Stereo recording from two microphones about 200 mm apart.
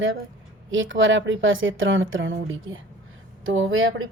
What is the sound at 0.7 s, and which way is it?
A woman's voice, 75° right (ahead or behind).